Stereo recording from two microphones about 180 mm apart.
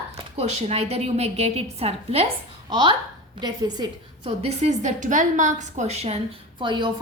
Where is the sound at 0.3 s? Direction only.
35° right (ahead or behind).